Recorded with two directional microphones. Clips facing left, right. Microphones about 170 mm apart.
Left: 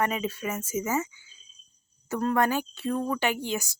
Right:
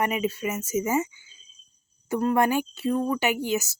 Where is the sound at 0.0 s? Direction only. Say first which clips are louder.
Right 2 dB; 10° right (ahead or behind).